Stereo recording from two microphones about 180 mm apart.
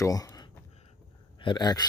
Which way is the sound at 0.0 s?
20° left (ahead or behind).